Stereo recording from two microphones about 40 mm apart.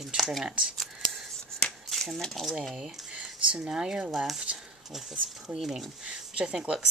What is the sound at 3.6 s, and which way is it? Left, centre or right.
Speech, centre.